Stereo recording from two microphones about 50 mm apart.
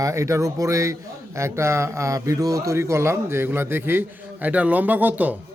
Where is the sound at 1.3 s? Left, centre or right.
Right.